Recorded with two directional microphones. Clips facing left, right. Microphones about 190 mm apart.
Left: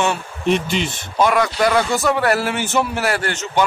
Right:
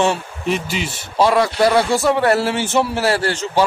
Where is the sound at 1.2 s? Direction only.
30° right (ahead or behind).